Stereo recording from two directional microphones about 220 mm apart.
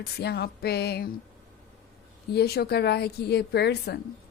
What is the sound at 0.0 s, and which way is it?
A woman's voice, 45° left (ahead or behind).